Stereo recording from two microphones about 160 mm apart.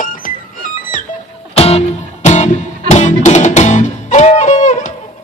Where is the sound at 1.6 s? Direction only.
40° left (ahead or behind).